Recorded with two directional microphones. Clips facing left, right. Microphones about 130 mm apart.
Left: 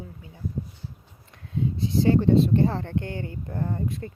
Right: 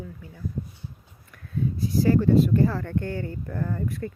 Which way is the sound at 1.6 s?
25° left (ahead or behind).